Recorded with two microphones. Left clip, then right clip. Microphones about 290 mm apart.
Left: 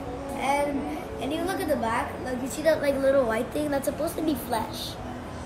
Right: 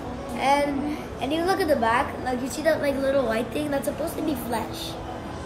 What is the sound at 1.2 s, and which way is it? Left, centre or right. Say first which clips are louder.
A woman's voice: right 6 dB; centre.